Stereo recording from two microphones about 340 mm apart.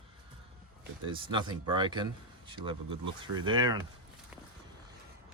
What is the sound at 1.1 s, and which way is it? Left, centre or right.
Speech, centre.